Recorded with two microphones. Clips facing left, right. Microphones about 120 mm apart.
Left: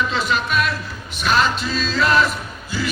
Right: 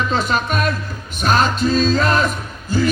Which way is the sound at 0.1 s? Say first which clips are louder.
Right 2 dB; 45° right (ahead or behind).